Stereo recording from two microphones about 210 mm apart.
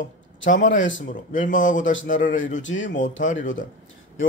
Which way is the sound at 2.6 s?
65° left (ahead or behind).